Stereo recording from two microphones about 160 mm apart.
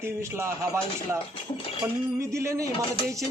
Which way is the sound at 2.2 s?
20° right (ahead or behind).